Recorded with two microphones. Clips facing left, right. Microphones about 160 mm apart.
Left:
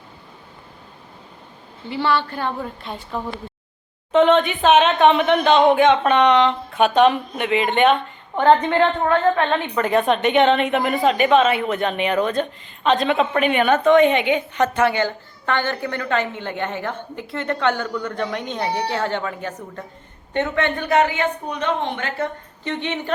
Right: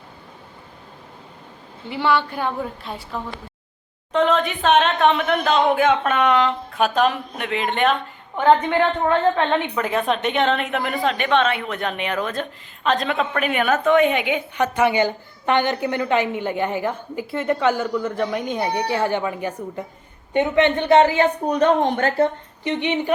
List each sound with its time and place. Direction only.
1.9 s a woman's voice: 10° right (ahead or behind)
9.0 s a woman's voice: 20° right (ahead or behind)
9.7 s a woman's voice: centre (ahead or behind); by 22.3 s 40° right (ahead or behind)
22.6 s a woman's voice: 15° right (ahead or behind)